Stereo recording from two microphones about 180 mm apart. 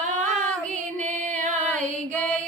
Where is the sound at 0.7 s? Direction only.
40° right (ahead or behind).